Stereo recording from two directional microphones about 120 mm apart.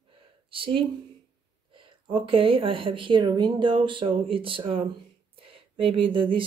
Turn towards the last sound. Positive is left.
turn(degrees=-45)  # may be behind; listen again after turning